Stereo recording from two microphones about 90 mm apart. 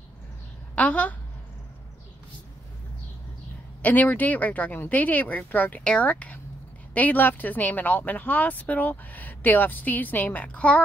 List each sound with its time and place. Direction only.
0.7 s speech: 15° left (ahead or behind)
3.8 s speech: 15° left (ahead or behind)